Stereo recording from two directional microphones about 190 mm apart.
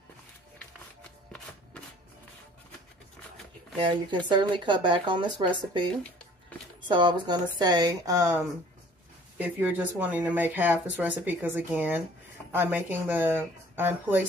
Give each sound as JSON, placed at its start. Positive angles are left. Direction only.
{"t": 4.3, "sound": "speech", "side_deg": -25}
{"t": 6.9, "sound": "speech", "side_deg": -25}